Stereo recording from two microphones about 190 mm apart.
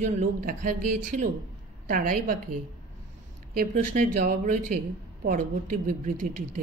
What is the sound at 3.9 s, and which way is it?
Speech, 45° right (ahead or behind).